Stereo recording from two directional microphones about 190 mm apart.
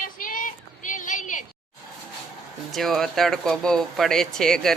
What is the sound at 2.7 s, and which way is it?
Speech, centre (ahead or behind).